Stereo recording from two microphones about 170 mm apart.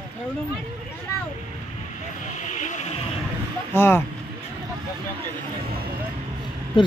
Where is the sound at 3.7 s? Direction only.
15° left (ahead or behind).